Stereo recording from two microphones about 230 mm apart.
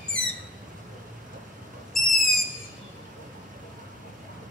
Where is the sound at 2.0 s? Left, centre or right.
Centre.